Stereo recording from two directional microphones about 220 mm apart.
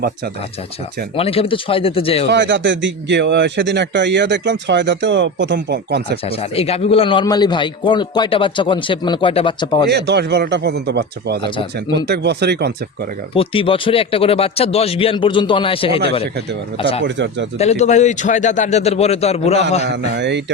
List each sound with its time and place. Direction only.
1.1 s a man's voice: 25° left (ahead or behind)
2.2 s a man's voice: 55° right (ahead or behind)
6.2 s a man's voice: 25° left (ahead or behind)
9.9 s a man's voice: 50° right (ahead or behind)
13.3 s a man's voice: 25° left (ahead or behind)
17.0 s speech: 55° right (ahead or behind)
17.6 s a man's voice: 30° left (ahead or behind)
19.9 s a man's voice: 55° right (ahead or behind)